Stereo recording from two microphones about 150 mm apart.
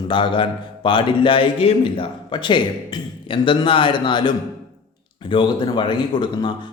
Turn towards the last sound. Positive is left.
turn(degrees=30)  # may be behind; listen again after turning